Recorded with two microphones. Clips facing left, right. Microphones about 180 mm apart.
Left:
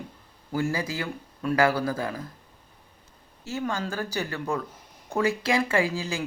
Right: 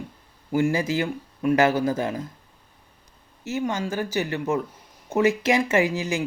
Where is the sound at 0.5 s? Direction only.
25° right (ahead or behind).